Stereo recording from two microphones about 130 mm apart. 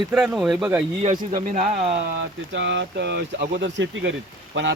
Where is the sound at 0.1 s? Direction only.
Centre (ahead or behind).